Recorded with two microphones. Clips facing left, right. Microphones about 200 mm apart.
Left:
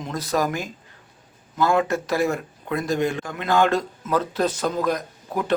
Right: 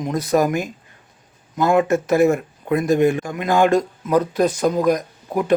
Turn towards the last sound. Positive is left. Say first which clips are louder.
# right 5 dB
turn(degrees=-15)  # may be behind; listen again after turning